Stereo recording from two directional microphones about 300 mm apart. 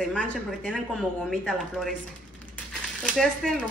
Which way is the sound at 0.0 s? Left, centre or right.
Centre.